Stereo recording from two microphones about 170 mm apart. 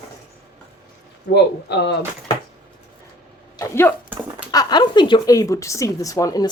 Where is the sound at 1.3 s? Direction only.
85° left.